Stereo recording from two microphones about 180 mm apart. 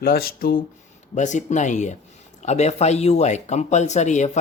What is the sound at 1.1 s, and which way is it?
Speech, 40° left (ahead or behind).